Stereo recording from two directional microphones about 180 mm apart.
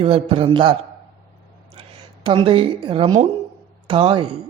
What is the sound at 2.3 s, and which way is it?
Speech, 30° right (ahead or behind).